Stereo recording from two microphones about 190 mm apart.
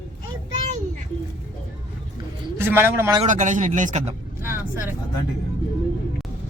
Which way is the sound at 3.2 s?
40° right (ahead or behind).